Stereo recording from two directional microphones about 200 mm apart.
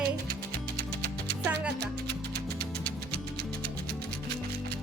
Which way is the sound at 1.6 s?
55° right (ahead or behind).